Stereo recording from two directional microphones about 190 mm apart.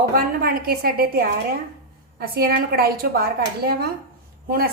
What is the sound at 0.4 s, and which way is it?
A woman's voice, 50° right (ahead or behind).